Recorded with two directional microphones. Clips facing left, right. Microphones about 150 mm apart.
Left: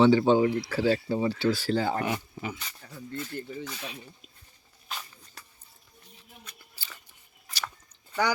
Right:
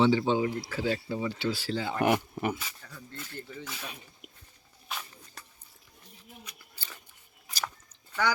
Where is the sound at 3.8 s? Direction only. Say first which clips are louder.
Left 3 dB; 50° right (ahead or behind).